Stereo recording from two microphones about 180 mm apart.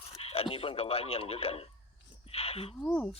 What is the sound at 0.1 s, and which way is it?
A man's voice, 35° left (ahead or behind).